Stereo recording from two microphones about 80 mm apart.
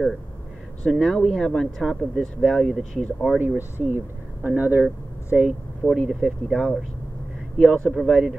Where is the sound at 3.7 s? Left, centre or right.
Right.